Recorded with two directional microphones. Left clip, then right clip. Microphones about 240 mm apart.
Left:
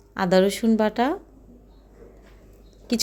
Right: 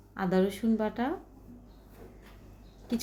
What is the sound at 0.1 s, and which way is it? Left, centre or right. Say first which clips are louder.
Speech: left 10 dB; left.